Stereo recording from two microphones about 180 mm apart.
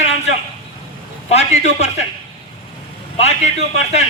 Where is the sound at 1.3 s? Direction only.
40° left (ahead or behind).